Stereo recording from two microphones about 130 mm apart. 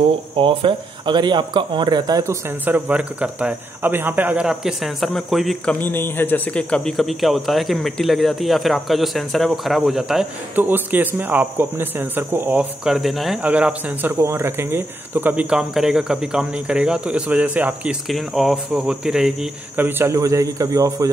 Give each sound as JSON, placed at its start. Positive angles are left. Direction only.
{"t": 0.4, "sound": "speech", "side_deg": -40}
{"t": 2.6, "sound": "a man's voice", "side_deg": -15}
{"t": 5.8, "sound": "a man's voice", "side_deg": 15}
{"t": 15.5, "sound": "a man's voice", "side_deg": -5}
{"t": 19.8, "sound": "a man's voice", "side_deg": -15}